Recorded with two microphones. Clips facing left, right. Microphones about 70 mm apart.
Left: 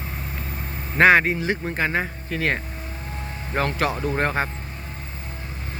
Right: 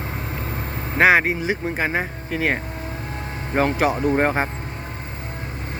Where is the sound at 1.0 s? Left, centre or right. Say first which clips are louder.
Even; centre.